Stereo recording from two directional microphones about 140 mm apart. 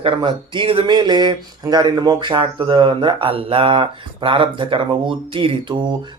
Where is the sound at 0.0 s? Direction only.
35° right (ahead or behind).